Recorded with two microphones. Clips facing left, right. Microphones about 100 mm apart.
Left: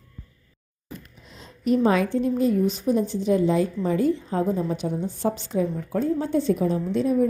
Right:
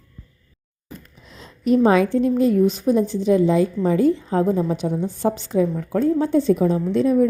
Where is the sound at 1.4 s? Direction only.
90° right.